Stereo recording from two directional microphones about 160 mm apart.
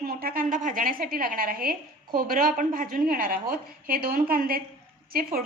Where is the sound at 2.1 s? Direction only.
65° right (ahead or behind).